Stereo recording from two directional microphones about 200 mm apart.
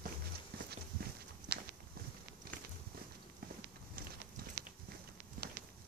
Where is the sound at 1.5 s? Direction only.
50° right (ahead or behind).